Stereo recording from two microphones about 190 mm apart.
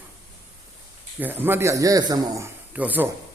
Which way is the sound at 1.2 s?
10° right (ahead or behind).